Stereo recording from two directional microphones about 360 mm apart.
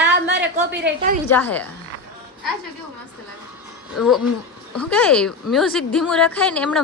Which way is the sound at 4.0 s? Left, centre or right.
Left.